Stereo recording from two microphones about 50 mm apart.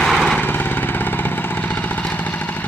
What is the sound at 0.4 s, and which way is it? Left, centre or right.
Vehicle, left.